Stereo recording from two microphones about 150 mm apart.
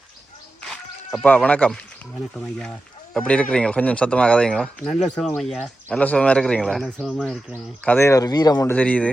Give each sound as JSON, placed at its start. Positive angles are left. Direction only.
{"t": 0.6, "sound": "a sound", "side_deg": 5}
{"t": 2.3, "sound": "speech", "side_deg": 5}
{"t": 7.9, "sound": "speech", "side_deg": 15}
{"t": 8.7, "sound": "speech", "side_deg": 10}